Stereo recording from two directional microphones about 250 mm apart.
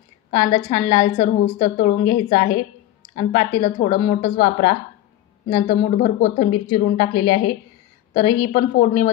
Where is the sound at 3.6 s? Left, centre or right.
Left.